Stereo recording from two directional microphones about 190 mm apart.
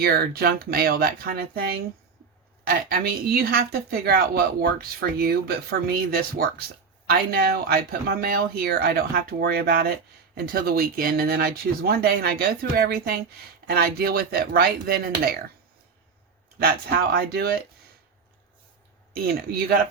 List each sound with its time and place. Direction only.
0.0 s speech: 55° right (ahead or behind)
16.6 s speech: 50° right (ahead or behind)
19.1 s speech: 55° right (ahead or behind)